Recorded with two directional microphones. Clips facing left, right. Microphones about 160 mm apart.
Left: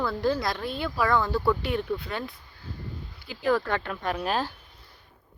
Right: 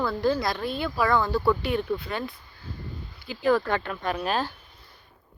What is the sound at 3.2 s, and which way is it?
Speech, 25° right (ahead or behind).